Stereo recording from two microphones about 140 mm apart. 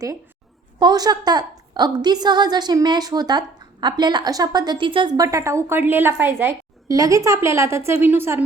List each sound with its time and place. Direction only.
0.8 s a woman's voice: 30° right (ahead or behind)